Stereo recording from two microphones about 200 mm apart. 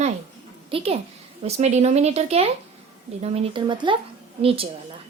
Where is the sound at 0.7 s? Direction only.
30° right (ahead or behind).